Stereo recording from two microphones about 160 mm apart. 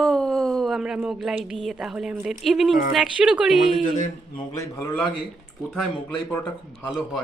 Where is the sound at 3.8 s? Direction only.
50° left (ahead or behind).